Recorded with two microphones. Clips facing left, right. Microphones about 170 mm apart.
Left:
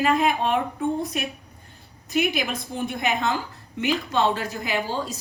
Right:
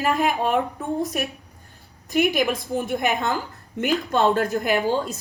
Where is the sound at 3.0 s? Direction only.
50° right (ahead or behind).